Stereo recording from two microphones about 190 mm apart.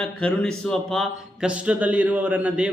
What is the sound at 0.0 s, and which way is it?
Speech, 5° left (ahead or behind).